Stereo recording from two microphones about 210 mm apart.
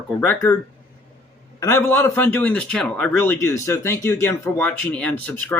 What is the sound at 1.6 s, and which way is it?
A man's voice, 10° left (ahead or behind).